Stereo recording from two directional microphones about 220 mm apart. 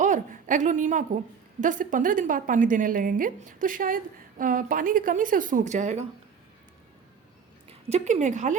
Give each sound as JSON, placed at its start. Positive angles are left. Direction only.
{"t": 0.0, "sound": "a woman's voice", "side_deg": -35}
{"t": 7.7, "sound": "speech", "side_deg": -30}